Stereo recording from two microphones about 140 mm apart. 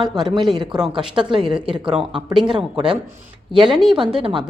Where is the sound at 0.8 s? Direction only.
5° right (ahead or behind).